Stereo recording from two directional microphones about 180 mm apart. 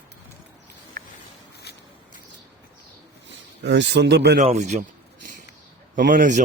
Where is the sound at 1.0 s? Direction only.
45° right (ahead or behind).